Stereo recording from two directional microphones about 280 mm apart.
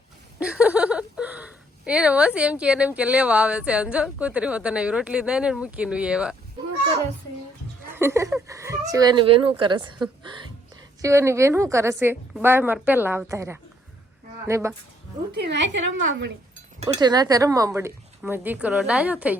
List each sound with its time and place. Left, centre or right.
0.3 s speech: centre
7.9 s a woman's voice: centre
15.3 s a woman's voice: right
16.9 s a woman's voice: centre